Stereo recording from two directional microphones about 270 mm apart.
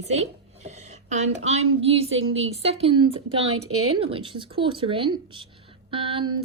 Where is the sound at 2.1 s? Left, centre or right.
Right.